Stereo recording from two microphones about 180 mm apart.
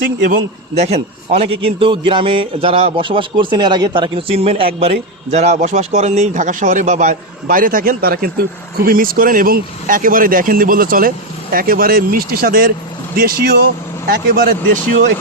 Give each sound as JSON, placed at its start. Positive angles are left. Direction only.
{"t": 0.0, "sound": "speech", "side_deg": -50}
{"t": 1.3, "sound": "a man's voice", "side_deg": -35}